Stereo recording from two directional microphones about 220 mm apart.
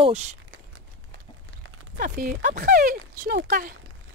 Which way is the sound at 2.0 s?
40° right (ahead or behind).